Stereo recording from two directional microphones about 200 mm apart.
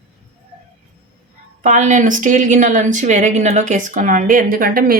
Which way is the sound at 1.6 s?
40° right (ahead or behind).